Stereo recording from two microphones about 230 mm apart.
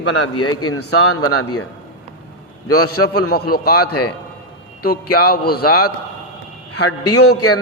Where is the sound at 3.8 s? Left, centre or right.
Left.